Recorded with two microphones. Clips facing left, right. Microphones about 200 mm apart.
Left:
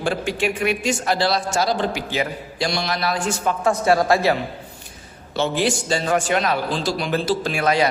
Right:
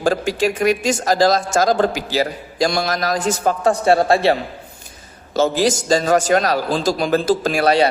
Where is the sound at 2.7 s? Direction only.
45° right (ahead or behind); by 4.4 s 30° right (ahead or behind).